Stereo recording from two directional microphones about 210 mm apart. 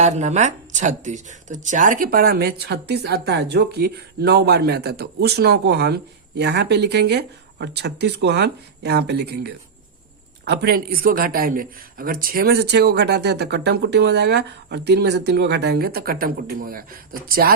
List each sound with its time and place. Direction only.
0.0 s speech: 35° right (ahead or behind)